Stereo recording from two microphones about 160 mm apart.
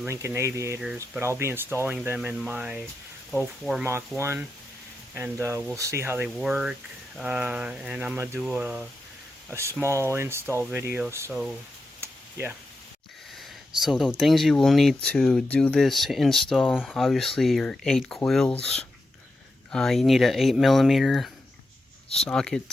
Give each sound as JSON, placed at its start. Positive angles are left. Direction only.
{"t": 0.0, "sound": "speech", "side_deg": -15}
{"t": 4.2, "sound": "speech", "side_deg": -15}
{"t": 6.2, "sound": "speech", "side_deg": -5}
{"t": 11.9, "sound": "a sound", "side_deg": -15}
{"t": 13.8, "sound": "speech", "side_deg": 0}
{"t": 19.7, "sound": "speech", "side_deg": 0}